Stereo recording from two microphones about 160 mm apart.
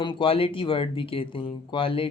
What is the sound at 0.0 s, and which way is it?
Speech, 30° left (ahead or behind).